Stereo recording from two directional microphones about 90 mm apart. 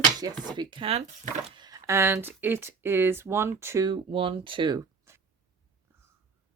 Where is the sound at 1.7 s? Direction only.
35° right (ahead or behind).